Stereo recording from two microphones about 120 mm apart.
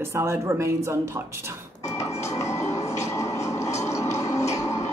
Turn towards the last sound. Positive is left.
turn(degrees=25)  # may be behind; listen again after turning